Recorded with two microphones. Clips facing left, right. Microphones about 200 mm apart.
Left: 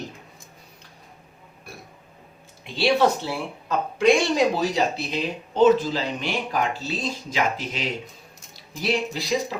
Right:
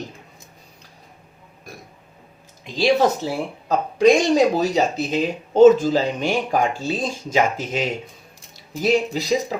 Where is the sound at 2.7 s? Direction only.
40° right (ahead or behind).